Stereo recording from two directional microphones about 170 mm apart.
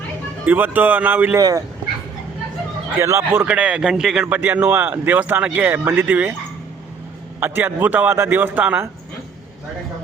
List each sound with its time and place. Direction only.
0.4 s a man's voice: 10° right (ahead or behind)
1.4 s speech: 20° right (ahead or behind)
3.0 s a man's voice: 15° right (ahead or behind)
7.3 s a man's voice: 10° right (ahead or behind)